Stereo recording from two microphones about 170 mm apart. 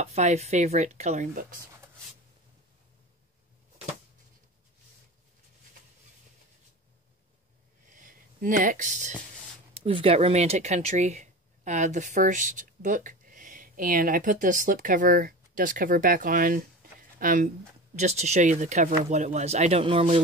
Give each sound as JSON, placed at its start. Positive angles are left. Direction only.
{"t": 0.0, "sound": "speech", "side_deg": -40}
{"t": 7.9, "sound": "a sound", "side_deg": -50}
{"t": 9.8, "sound": "speech", "side_deg": -35}
{"t": 17.9, "sound": "speech", "side_deg": -40}